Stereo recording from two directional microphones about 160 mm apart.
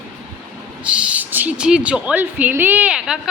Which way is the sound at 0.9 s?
5° right (ahead or behind).